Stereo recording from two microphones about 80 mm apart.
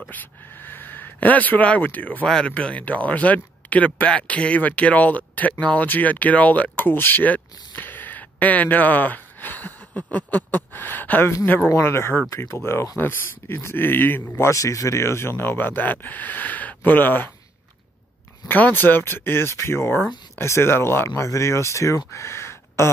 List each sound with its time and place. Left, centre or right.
0.1 s speech: left
7.7 s gasp: left
10.1 s speech: left
11.7 s speech: left
14.5 s speech: left
18.5 s speech: left